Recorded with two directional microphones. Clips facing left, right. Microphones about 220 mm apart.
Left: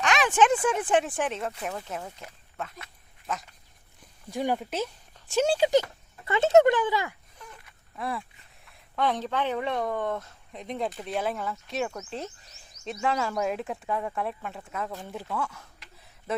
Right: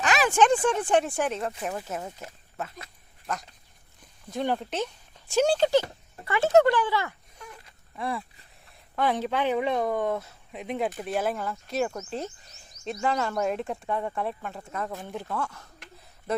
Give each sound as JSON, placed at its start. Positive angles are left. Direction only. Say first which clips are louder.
{"t": 0.0, "sound": "speech", "louder": "right 1 dB", "side_deg": 0}
{"t": 1.7, "sound": "speech", "louder": "right 2 dB", "side_deg": -10}
{"t": 3.3, "sound": "speech", "louder": "right 1 dB", "side_deg": 0}
{"t": 6.2, "sound": "speech", "louder": "left 1 dB", "side_deg": 20}
{"t": 7.9, "sound": "speech", "louder": "right 1 dB", "side_deg": 0}